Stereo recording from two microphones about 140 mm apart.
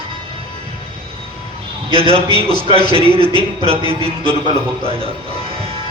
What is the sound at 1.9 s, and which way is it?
A man's voice, 45° right (ahead or behind).